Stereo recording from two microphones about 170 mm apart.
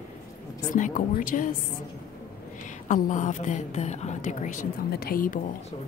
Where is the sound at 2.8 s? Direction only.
50° left (ahead or behind).